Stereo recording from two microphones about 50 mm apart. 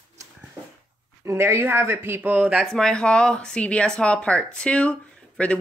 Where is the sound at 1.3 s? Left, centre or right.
Right.